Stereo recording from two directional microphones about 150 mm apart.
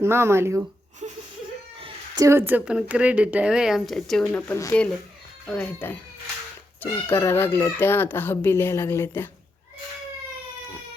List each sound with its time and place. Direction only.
0.0 s a woman's voice: 15° right (ahead or behind)
1.0 s speech: 50° right (ahead or behind)
1.8 s a woman's voice: 25° right (ahead or behind); by 4.3 s centre (ahead or behind)
4.3 s speech: 15° left (ahead or behind)
7.1 s speech: 15° left (ahead or behind)